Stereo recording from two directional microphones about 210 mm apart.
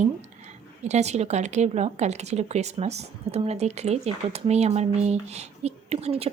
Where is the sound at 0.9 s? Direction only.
30° right (ahead or behind).